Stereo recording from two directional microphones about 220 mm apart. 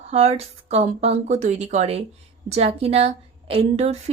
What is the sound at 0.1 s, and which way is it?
A woman's voice, 30° right (ahead or behind).